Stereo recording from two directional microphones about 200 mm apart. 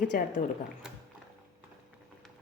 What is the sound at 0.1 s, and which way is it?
Speech, 45° left (ahead or behind).